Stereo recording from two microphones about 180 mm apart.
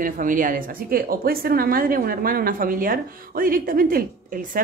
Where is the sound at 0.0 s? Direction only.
50° right (ahead or behind).